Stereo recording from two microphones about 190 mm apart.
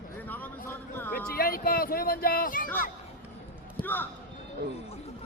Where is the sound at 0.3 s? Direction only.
10° left (ahead or behind).